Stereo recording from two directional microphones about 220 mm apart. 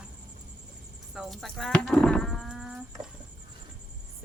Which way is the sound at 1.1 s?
Centre (ahead or behind).